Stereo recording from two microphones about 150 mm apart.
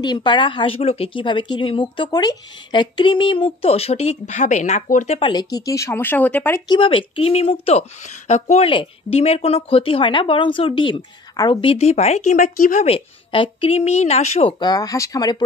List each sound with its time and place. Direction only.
0.0 s speech: 30° left (ahead or behind); by 5.2 s 55° left (ahead or behind)
5.2 s speech: 30° left (ahead or behind); by 6.6 s 15° left (ahead or behind)
6.7 s a woman's voice: 35° left (ahead or behind); by 8.6 s 50° left (ahead or behind)
8.6 s speech: 40° left (ahead or behind)
11.6 s a woman's voice: 40° left (ahead or behind); by 12.8 s 65° left (ahead or behind)
12.8 s a woman's voice: 40° left (ahead or behind)
14.6 s speech: 25° left (ahead or behind)